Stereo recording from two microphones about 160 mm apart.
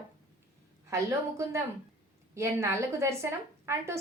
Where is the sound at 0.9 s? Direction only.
20° right (ahead or behind).